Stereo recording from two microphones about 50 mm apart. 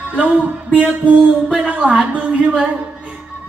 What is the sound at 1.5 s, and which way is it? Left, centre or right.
Speech, centre.